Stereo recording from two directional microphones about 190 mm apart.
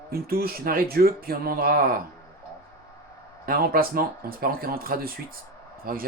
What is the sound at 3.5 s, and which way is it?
Speech, 50° right (ahead or behind).